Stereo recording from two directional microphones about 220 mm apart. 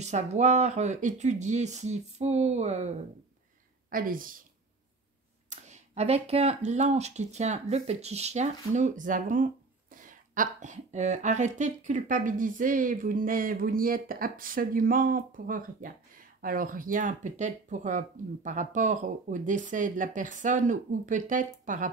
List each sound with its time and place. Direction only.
0.0 s speech: 30° right (ahead or behind)
5.5 s speech: 30° right (ahead or behind)